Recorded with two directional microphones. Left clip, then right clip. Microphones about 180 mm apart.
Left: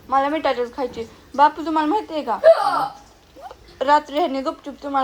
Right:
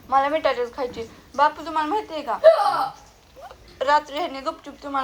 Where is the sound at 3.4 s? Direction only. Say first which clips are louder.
Left 3 dB; 25° left (ahead or behind).